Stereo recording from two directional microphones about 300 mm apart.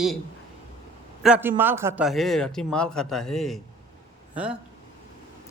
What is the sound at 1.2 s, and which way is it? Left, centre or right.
Speech, centre.